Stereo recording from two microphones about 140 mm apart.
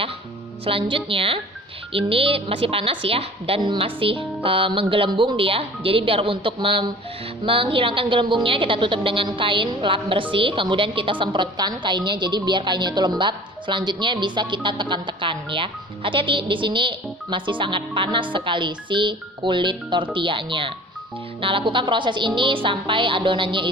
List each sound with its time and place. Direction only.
0.6 s a woman's voice: 40° right (ahead or behind)